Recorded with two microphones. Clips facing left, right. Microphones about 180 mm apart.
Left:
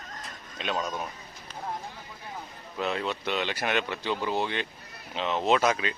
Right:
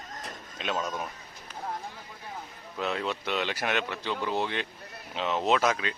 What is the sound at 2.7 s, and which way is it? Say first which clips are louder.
Speech: left 1 dB; centre (ahead or behind).